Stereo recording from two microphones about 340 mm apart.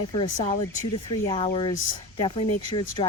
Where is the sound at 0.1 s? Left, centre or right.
Centre.